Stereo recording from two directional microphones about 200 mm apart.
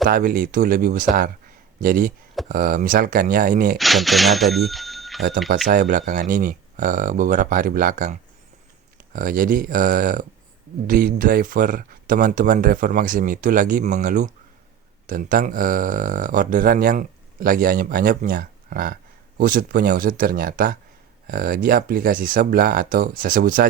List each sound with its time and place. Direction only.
0.1 s speech: 45° right (ahead or behind)
3.8 s speech: centre (ahead or behind)
5.6 s speech: 45° right (ahead or behind)
9.1 s speech: 45° right (ahead or behind)